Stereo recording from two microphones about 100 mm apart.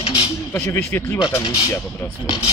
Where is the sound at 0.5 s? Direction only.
20° left (ahead or behind).